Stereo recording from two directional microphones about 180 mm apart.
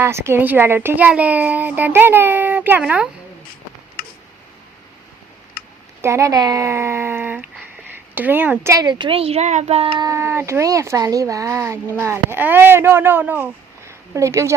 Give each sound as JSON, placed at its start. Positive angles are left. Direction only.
{"t": 0.0, "sound": "a child's voice", "side_deg": -15}
{"t": 6.0, "sound": "a child's voice", "side_deg": -15}
{"t": 10.0, "sound": "a child's voice", "side_deg": -15}